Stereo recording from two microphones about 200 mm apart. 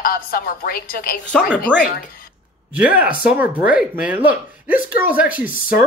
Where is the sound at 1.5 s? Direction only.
5° right (ahead or behind).